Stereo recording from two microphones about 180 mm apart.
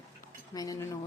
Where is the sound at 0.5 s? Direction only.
20° left (ahead or behind).